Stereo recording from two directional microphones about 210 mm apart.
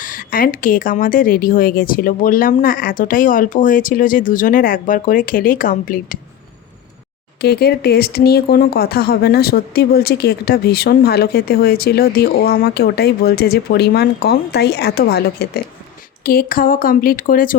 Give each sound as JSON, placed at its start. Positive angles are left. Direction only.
{"t": 0.0, "sound": "a woman's voice", "side_deg": 40}
{"t": 7.4, "sound": "speech", "side_deg": 50}